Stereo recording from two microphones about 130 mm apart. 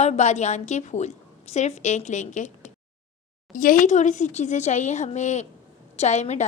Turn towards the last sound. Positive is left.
turn(degrees=60)  # may be behind; listen again after turning